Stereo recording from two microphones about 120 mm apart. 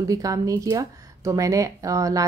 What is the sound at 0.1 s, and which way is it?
A woman's voice, 30° right (ahead or behind).